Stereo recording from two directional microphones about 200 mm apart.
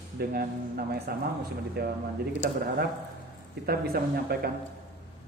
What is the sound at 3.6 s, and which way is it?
Speech, 50° right (ahead or behind).